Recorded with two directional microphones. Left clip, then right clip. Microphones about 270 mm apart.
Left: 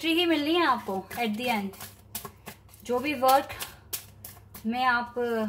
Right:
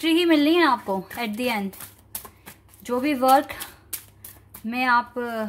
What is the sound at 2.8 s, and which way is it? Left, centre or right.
Speech, right.